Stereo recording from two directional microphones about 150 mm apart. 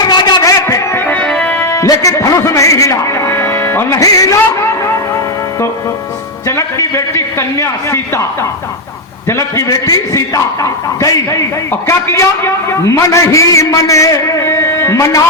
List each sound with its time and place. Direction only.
0.0 s music: 30° left (ahead or behind)
6.6 s a man's voice: 20° left (ahead or behind)
9.3 s a man's voice: 20° left (ahead or behind)